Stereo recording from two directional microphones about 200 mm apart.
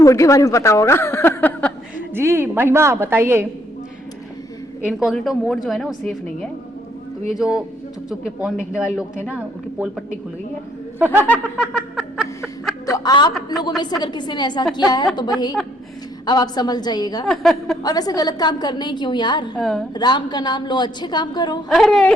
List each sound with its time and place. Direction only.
0.0 s speech: 15° left (ahead or behind)
2.1 s a woman's voice: 10° right (ahead or behind)
4.8 s a woman's voice: centre (ahead or behind)
11.0 s a woman's voice: 10° right (ahead or behind)
11.3 s a sound: centre (ahead or behind)
12.8 s a woman's voice: 20° left (ahead or behind)
17.2 s a woman's voice: centre (ahead or behind)
17.8 s a woman's voice: 20° left (ahead or behind)
19.5 s a woman's voice: centre (ahead or behind)
19.9 s a woman's voice: 20° left (ahead or behind)
21.7 s a woman's voice: centre (ahead or behind)